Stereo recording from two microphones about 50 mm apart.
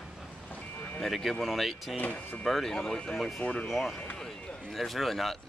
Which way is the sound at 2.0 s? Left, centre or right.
Left.